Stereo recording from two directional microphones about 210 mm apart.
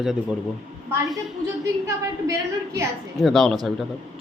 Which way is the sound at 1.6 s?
15° right (ahead or behind).